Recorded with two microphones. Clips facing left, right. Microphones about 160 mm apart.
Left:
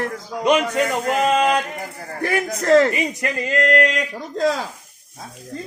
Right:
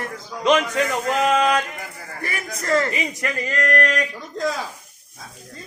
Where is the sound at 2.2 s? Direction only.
65° left (ahead or behind).